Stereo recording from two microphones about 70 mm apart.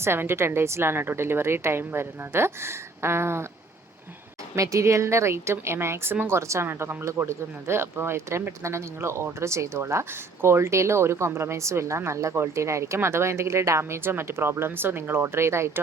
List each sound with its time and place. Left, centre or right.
0.0 s speech: right
4.5 s speech: right
6.4 s speech: right